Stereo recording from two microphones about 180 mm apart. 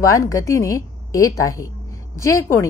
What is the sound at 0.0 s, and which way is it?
A woman's voice, 20° left (ahead or behind).